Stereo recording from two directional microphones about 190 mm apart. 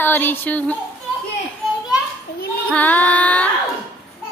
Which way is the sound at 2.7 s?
10° left (ahead or behind).